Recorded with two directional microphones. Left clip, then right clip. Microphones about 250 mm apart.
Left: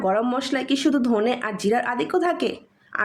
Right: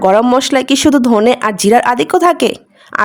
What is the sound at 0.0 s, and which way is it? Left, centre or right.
Speech, right.